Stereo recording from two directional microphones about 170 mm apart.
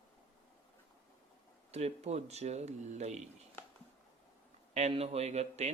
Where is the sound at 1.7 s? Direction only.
40° right (ahead or behind).